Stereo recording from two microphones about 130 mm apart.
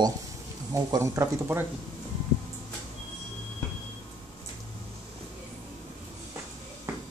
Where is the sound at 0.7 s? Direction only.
25° right (ahead or behind).